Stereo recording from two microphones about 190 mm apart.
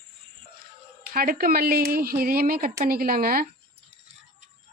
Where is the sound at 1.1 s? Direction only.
50° right (ahead or behind).